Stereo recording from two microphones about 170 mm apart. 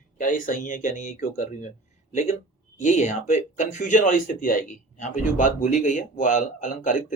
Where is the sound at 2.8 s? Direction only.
45° left (ahead or behind).